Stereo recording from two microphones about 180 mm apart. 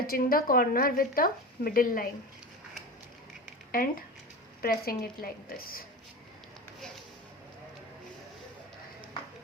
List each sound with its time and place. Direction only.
0.1 s a woman's voice: 55° left (ahead or behind)
3.7 s a woman's voice: 50° left (ahead or behind)